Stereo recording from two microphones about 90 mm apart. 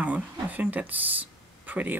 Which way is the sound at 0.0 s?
15° right (ahead or behind).